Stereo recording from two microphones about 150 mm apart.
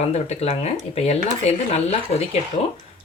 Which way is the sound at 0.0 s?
45° left (ahead or behind).